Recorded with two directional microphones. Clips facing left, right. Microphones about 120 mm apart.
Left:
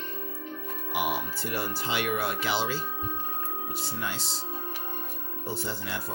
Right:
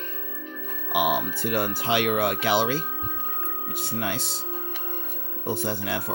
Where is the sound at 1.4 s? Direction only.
55° right (ahead or behind).